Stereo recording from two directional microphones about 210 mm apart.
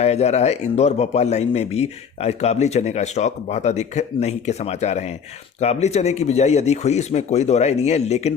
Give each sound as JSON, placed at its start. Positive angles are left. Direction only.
{"t": 0.0, "sound": "a man's voice", "side_deg": 30}